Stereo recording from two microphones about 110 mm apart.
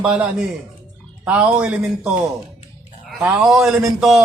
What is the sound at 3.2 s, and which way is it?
A man's voice, 10° right (ahead or behind).